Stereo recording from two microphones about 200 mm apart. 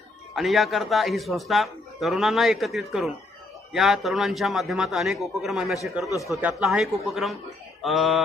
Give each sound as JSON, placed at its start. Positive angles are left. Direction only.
{"t": 0.3, "sound": "a man's voice", "side_deg": 0}
{"t": 6.1, "sound": "speech", "side_deg": 15}
{"t": 6.6, "sound": "a man's voice", "side_deg": 0}
{"t": 7.8, "sound": "a sound", "side_deg": 0}